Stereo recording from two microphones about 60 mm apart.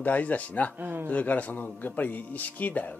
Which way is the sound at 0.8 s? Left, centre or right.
Right.